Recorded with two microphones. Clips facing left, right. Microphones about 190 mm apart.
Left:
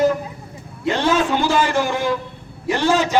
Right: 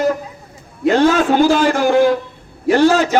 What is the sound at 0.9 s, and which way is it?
A man's voice, 45° right (ahead or behind).